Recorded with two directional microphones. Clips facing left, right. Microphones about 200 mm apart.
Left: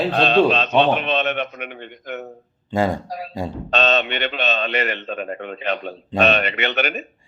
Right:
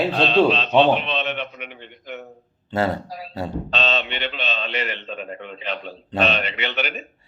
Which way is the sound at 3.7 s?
50° left (ahead or behind).